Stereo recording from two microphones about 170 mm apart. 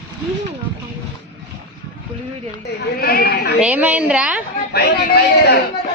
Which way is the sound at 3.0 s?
65° left (ahead or behind).